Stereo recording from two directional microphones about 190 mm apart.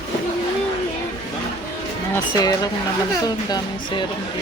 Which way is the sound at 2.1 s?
20° left (ahead or behind).